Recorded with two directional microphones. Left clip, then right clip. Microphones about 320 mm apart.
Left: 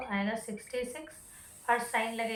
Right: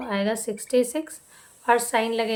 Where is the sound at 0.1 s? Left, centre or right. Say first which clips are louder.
Right 11 dB; centre.